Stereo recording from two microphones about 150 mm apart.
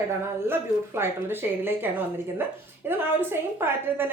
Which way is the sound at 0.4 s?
15° right (ahead or behind).